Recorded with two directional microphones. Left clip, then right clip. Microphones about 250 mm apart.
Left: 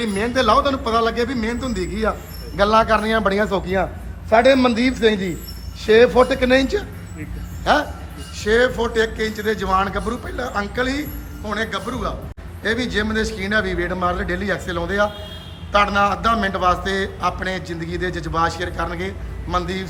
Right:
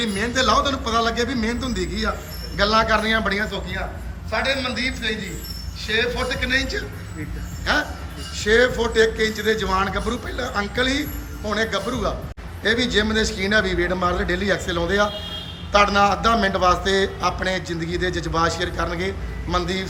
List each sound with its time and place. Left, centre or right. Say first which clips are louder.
0.0 s a man's voice: left 2 dB; centre
3.5 s a man's voice: left 8 dB; left; by 19.9 s centre